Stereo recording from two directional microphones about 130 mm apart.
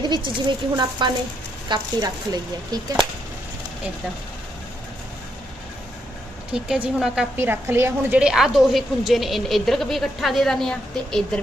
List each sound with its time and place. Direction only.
0.1 s speech: 35° right (ahead or behind)
6.5 s a woman's voice: 10° right (ahead or behind)
8.2 s a woman's voice: 5° right (ahead or behind)